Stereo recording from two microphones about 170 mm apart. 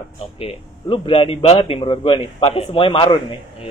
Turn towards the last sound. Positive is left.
turn(degrees=30)  # may be behind; listen again after turning